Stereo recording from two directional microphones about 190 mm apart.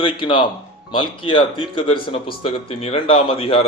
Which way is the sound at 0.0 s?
25° left (ahead or behind).